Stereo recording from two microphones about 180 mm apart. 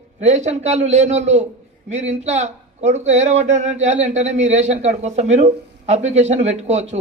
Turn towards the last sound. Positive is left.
turn(degrees=-40)  # may be behind; listen again after turning